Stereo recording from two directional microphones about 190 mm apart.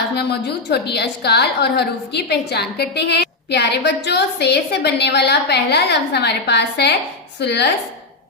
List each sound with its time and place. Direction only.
0.2 s a woman's voice: 60° left (ahead or behind)